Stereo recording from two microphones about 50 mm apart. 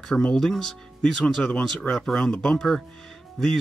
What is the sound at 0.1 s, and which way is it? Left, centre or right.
Speech, centre.